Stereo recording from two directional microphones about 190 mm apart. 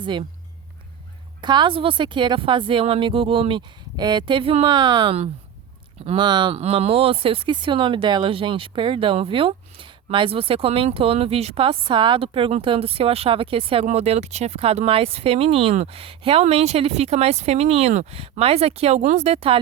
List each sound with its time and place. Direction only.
0.0 s speech: 25° right (ahead or behind)
1.4 s speech: 25° right (ahead or behind)